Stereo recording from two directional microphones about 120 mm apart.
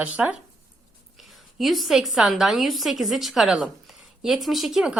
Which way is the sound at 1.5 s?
Centre (ahead or behind).